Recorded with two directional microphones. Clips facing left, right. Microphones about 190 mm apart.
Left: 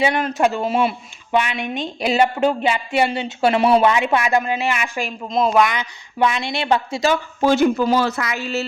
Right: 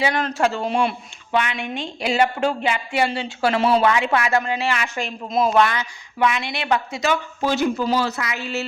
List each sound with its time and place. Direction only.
0.1 s speech: 10° left (ahead or behind)
0.6 s speech: 5° left (ahead or behind)
1.3 s speech: 15° left (ahead or behind)
5.3 s speech: 5° right (ahead or behind)
5.5 s speech: 15° left (ahead or behind)
6.1 s speech: 30° left (ahead or behind)
7.4 s speech: 50° left (ahead or behind)